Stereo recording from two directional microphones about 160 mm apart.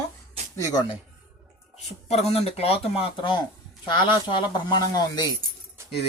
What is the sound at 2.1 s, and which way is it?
Speech, 40° left (ahead or behind).